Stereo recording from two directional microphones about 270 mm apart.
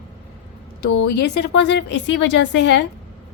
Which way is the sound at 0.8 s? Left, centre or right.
Left.